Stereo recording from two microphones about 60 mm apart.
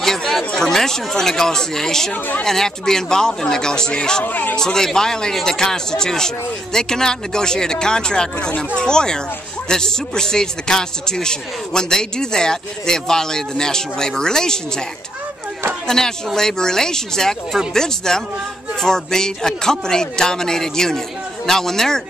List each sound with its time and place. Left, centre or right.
0.0 s speech: centre
4.2 s a man's voice: left
4.6 s speech: centre
16.3 s speech: centre